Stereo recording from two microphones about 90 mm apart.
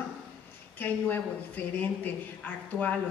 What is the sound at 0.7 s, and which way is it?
A woman's voice, 20° left (ahead or behind).